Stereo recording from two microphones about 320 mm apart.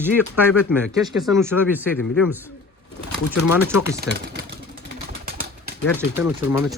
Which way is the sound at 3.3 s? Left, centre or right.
Left.